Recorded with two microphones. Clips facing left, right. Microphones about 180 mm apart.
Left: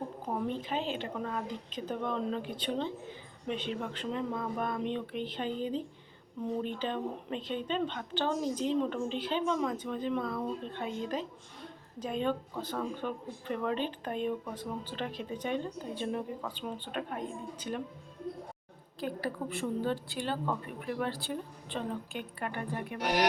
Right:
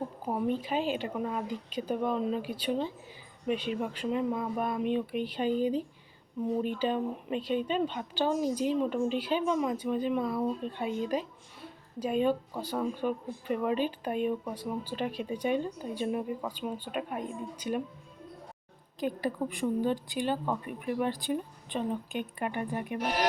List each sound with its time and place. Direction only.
0.3 s speech: 10° right (ahead or behind)
18.9 s speech: 15° right (ahead or behind)